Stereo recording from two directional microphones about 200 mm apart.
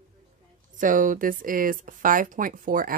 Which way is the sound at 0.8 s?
40° right (ahead or behind).